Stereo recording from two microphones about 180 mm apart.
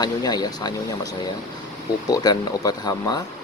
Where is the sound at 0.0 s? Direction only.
20° left (ahead or behind).